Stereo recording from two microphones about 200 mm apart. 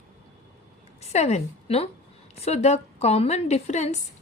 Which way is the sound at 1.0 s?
35° left (ahead or behind).